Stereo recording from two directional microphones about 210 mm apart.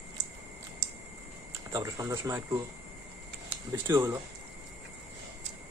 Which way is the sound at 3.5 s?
10° right (ahead or behind).